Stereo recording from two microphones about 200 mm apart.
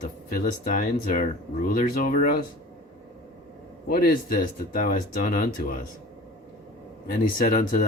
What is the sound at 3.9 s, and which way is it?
Speech, 45° left (ahead or behind).